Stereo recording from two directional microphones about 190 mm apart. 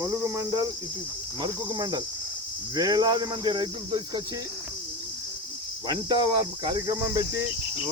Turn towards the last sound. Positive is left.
turn(degrees=-20)  # may be behind; listen again after turning